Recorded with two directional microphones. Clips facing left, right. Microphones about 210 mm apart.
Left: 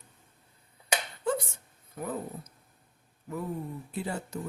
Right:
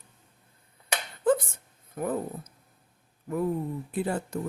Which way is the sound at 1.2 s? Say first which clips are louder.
Right 9 dB; 50° right (ahead or behind).